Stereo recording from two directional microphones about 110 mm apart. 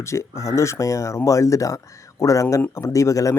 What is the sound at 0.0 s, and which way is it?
Speech, 25° left (ahead or behind).